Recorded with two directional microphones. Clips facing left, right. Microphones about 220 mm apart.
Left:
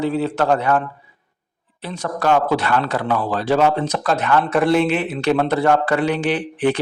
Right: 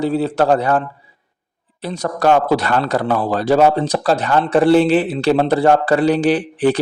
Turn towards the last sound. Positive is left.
turn(degrees=-35)  # may be behind; listen again after turning